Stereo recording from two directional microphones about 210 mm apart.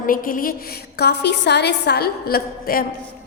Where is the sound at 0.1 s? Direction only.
40° left (ahead or behind).